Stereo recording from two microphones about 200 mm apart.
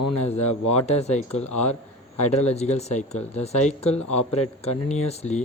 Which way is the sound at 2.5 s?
35° left (ahead or behind).